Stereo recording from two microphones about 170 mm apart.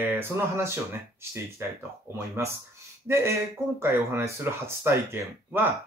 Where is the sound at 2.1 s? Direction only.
15° right (ahead or behind).